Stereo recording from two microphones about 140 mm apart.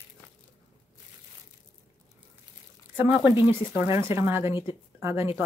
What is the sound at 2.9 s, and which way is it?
Speech, 15° right (ahead or behind).